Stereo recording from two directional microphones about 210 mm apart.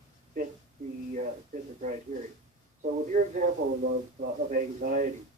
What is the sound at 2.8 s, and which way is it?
Speech, 35° right (ahead or behind).